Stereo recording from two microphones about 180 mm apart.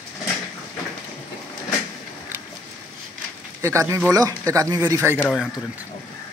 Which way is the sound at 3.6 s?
15° right (ahead or behind).